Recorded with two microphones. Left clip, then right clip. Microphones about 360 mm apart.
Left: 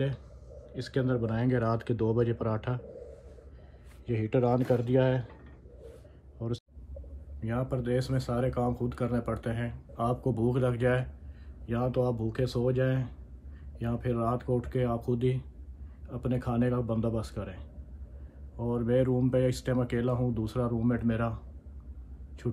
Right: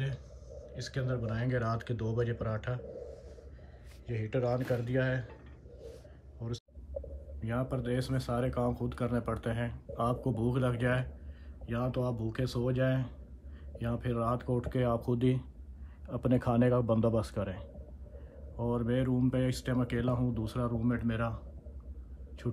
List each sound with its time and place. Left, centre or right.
0.0 s speech: centre
2.3 s speech: left
4.0 s speech: centre
7.4 s a man's voice: centre; by 17.6 s right
18.6 s speech: centre